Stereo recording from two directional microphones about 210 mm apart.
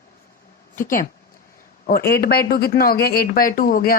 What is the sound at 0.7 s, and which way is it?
Speech, 40° left (ahead or behind).